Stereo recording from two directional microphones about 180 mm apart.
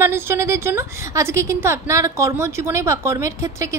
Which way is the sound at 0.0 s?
15° right (ahead or behind).